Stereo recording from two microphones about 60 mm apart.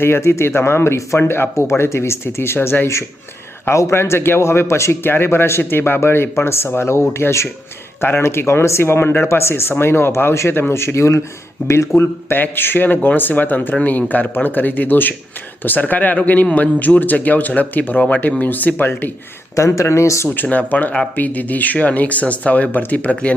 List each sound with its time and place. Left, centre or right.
0.0 s speech: left
11.9 s speech: left
19.5 s speech: left
20.2 s speech: left